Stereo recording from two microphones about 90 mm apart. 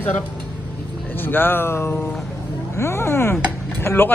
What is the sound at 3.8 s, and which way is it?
Speech, 25° left (ahead or behind).